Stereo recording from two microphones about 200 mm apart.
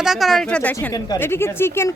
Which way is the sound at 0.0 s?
Centre (ahead or behind).